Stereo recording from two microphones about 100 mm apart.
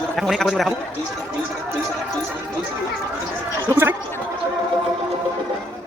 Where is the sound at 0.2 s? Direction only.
Centre (ahead or behind).